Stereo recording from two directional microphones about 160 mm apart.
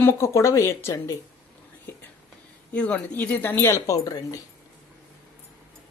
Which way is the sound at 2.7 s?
10° left (ahead or behind).